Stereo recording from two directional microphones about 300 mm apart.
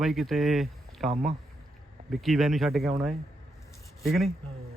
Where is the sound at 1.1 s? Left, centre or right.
Right.